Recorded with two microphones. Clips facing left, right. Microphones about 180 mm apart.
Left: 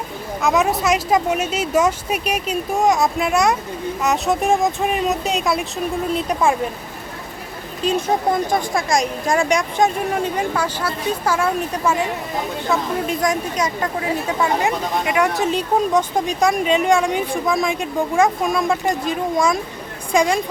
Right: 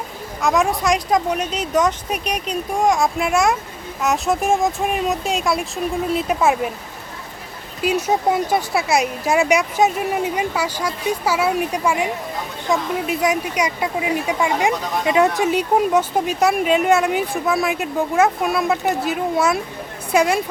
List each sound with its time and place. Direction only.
0.4 s speech: centre (ahead or behind)
7.8 s speech: 10° right (ahead or behind)
15.0 s speech: 25° right (ahead or behind)
15.4 s speech: 10° right (ahead or behind)